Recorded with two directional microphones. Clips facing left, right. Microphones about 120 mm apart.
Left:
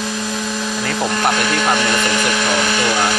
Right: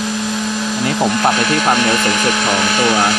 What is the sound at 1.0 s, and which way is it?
Speech, 20° right (ahead or behind).